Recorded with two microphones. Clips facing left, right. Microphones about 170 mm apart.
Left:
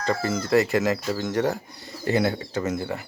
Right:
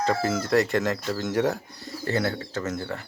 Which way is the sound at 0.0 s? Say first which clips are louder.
Right 1 dB; centre (ahead or behind).